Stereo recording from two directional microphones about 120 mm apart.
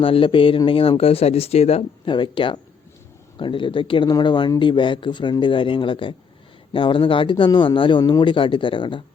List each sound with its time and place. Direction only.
0.0 s speech: 50° left (ahead or behind)
2.0 s speech: 40° left (ahead or behind)